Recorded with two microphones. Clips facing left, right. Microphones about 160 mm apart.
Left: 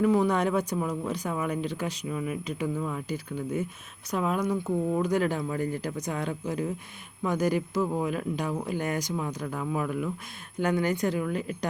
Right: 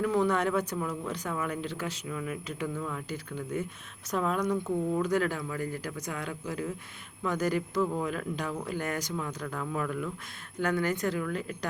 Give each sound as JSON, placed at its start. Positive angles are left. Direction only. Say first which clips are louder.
{"t": 0.0, "sound": "speech", "louder": "left 3 dB", "side_deg": 15}
{"t": 4.9, "sound": "a man's voice", "louder": "left 2 dB", "side_deg": 15}